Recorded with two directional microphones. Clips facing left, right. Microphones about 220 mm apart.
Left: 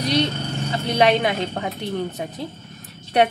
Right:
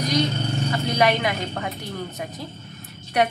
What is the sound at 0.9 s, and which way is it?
Speech, 25° left (ahead or behind).